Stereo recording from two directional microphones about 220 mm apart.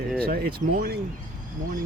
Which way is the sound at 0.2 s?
45° right (ahead or behind).